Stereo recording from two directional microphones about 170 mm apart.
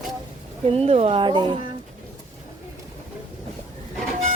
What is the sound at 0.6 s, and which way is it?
Speech, 35° right (ahead or behind).